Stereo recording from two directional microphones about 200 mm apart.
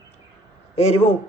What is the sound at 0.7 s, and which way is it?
Speech, 30° left (ahead or behind).